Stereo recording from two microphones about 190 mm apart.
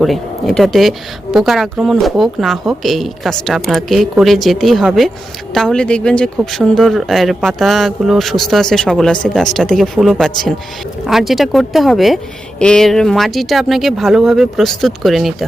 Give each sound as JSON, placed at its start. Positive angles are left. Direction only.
{"t": 0.0, "sound": "speech", "side_deg": 0}